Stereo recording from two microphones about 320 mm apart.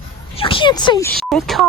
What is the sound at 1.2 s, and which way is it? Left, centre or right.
Speech, centre.